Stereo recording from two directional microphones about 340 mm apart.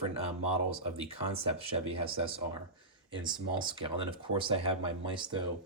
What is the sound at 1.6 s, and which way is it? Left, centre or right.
Speech, centre.